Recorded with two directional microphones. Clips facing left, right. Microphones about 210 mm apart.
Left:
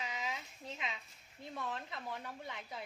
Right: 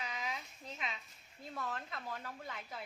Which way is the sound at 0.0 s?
20° left (ahead or behind).